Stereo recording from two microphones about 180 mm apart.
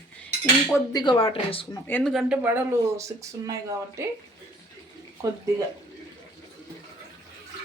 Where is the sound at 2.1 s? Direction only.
10° right (ahead or behind).